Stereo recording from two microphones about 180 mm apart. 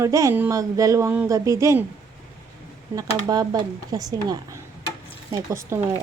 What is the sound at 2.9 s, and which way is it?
Speech, 20° right (ahead or behind).